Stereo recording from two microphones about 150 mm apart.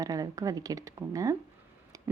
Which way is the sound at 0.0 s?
25° right (ahead or behind).